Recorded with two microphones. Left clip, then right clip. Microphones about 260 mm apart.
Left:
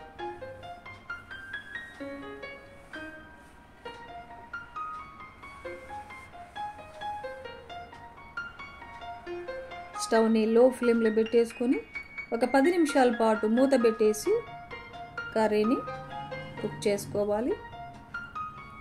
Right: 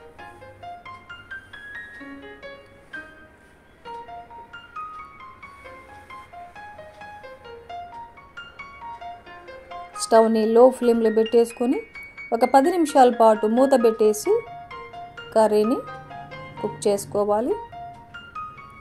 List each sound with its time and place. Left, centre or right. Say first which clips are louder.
9.9 s speech: right 8 dB; centre
16.8 s speech: right 7 dB; right